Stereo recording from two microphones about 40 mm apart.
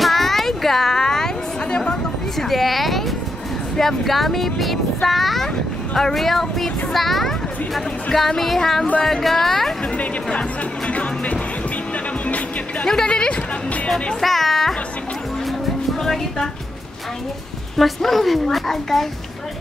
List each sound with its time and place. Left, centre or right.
0.0 s a sound: centre
2.3 s a sound: centre
3.7 s speech: centre
10.9 s speech: left
12.8 s speech: centre
14.2 s speech: centre
16.0 s speech: centre
17.7 s speech: centre